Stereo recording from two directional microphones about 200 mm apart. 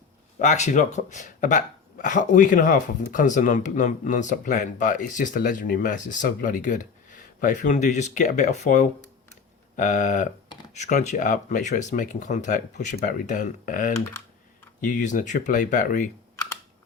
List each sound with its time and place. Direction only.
0.3 s speech: 35° left (ahead or behind)